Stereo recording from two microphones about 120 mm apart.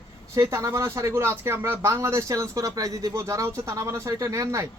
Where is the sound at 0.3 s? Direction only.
25° right (ahead or behind).